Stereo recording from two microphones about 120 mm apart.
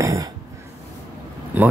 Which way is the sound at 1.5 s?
15° right (ahead or behind).